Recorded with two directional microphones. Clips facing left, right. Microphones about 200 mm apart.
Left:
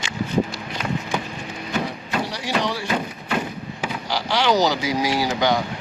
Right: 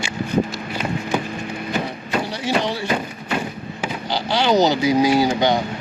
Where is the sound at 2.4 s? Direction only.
25° right (ahead or behind).